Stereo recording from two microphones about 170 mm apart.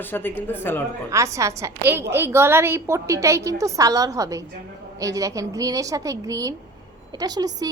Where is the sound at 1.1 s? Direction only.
20° right (ahead or behind).